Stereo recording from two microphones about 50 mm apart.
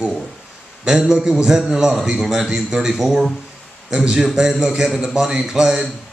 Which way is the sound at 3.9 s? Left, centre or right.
Centre.